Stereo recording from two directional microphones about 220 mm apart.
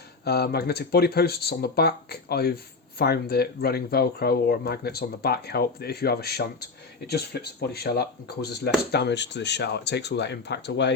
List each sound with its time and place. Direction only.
0.3 s speech: 45° left (ahead or behind)